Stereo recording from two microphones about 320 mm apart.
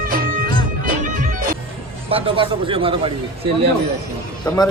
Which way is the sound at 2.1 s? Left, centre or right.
Centre.